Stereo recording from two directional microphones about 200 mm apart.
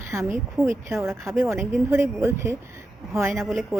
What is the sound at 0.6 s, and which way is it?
Speech, 15° right (ahead or behind).